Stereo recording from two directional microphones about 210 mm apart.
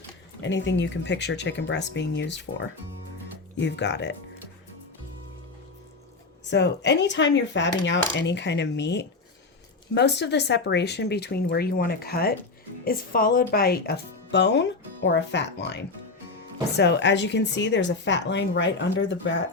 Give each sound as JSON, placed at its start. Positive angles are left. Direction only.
{"t": 0.4, "sound": "a woman's voice", "side_deg": 60}
{"t": 3.6, "sound": "a woman's voice", "side_deg": 55}
{"t": 6.5, "sound": "a woman's voice", "side_deg": 55}